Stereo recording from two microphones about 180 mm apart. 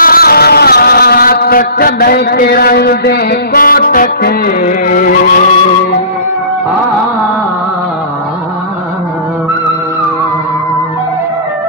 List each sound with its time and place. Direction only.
0.0 s vehicle: 55° left (ahead or behind)